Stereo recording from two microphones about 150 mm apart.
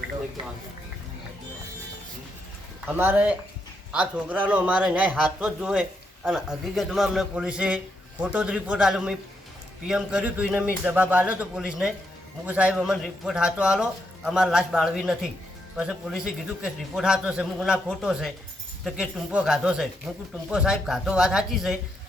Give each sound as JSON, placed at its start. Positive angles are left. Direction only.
{"t": 2.8, "sound": "a man's voice", "side_deg": -15}